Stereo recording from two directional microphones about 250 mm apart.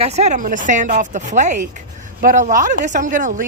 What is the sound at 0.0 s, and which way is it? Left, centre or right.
Speech, right.